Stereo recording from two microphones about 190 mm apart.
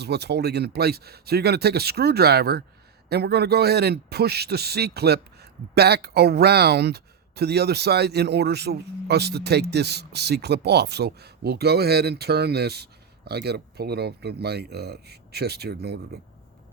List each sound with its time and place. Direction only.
0.0 s speech: 60° right (ahead or behind)